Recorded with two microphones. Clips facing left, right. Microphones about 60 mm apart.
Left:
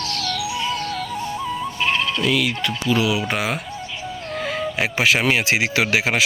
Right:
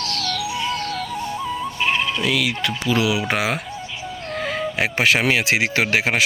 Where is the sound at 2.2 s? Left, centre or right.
Right.